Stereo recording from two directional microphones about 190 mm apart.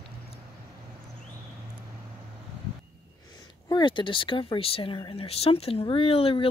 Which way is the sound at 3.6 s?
25° left (ahead or behind).